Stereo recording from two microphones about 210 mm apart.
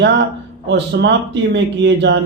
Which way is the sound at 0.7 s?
55° right (ahead or behind).